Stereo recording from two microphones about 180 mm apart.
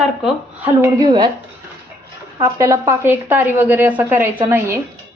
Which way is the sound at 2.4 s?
20° right (ahead or behind).